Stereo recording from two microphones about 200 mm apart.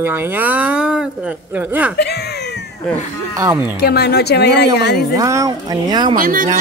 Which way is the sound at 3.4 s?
15° right (ahead or behind).